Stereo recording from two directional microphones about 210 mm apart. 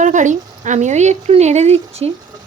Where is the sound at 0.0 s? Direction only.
35° right (ahead or behind).